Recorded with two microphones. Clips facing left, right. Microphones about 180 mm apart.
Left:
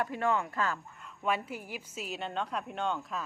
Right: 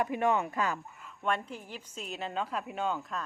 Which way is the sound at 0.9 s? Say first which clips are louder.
Even; centre (ahead or behind).